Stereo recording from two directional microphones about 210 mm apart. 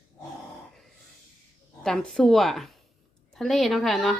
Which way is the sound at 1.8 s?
Centre (ahead or behind).